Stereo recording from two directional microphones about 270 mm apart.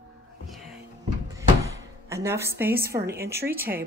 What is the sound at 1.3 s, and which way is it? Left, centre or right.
Drawer open or close, centre.